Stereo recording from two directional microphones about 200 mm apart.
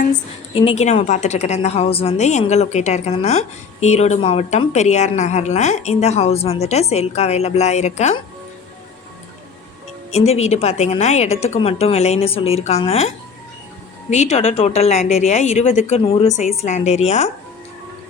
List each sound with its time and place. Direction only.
0.5 s a woman's voice: 30° left (ahead or behind)
10.1 s a woman's voice: 35° left (ahead or behind)